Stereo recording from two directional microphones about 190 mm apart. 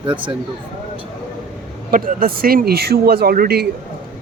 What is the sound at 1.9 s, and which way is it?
Speech, 50° right (ahead or behind).